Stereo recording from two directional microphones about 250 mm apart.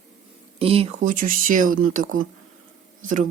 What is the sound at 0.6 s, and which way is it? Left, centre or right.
Speech, right.